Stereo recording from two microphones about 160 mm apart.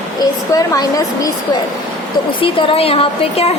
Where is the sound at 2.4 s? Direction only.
35° left (ahead or behind).